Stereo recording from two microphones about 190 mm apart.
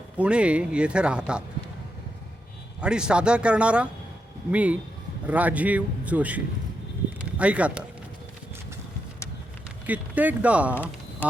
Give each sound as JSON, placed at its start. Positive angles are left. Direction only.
{"t": 0.2, "sound": "speech", "side_deg": -5}
{"t": 2.8, "sound": "a man's voice", "side_deg": -5}
{"t": 9.8, "sound": "a man's voice", "side_deg": -10}
{"t": 11.2, "sound": "speech", "side_deg": 10}